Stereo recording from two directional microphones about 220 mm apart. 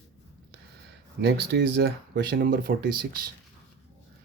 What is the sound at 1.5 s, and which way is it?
Speech, 50° right (ahead or behind).